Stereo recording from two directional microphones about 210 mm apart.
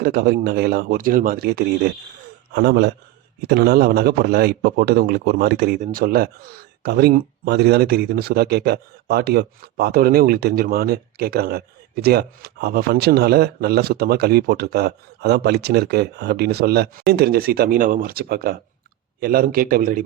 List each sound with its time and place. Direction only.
0.0 s a man's voice: 45° right (ahead or behind)